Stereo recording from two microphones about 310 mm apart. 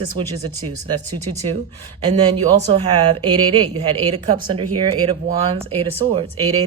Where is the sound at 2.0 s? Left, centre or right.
Centre.